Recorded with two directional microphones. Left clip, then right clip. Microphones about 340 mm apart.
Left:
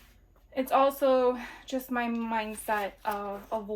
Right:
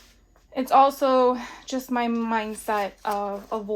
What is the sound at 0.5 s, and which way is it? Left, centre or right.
Speech, centre.